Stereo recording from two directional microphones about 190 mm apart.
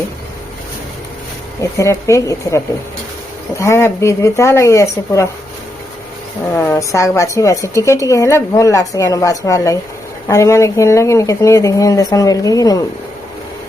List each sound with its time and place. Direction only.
1.8 s a woman's voice: 15° left (ahead or behind)
3.6 s a woman's voice: 15° left (ahead or behind)
6.5 s a woman's voice: 15° left (ahead or behind)